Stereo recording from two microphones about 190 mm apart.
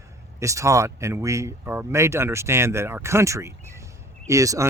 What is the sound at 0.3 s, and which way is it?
Speech, 15° right (ahead or behind).